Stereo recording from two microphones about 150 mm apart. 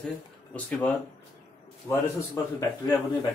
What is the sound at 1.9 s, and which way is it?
Speech, 20° left (ahead or behind).